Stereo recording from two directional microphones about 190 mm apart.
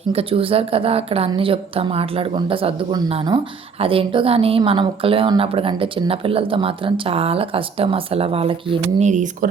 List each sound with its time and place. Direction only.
0.1 s a woman's voice: 30° right (ahead or behind)